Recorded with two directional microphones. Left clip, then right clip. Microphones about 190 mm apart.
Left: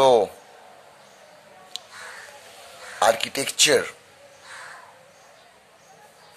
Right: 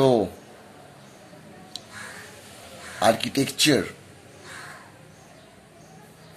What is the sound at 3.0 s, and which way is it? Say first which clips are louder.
Speech: left 1 dB; 35° left (ahead or behind).